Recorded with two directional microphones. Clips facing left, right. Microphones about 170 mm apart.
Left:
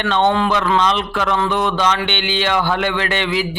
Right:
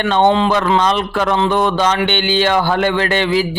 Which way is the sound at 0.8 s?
40° right (ahead or behind).